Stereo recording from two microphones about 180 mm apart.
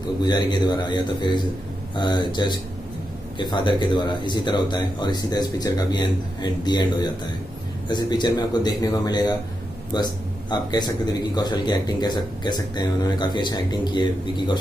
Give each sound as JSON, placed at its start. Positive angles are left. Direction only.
{"t": 0.2, "sound": "a man's voice", "side_deg": 25}